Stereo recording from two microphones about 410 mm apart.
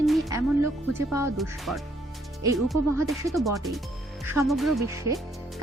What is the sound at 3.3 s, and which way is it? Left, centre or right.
Speech, centre.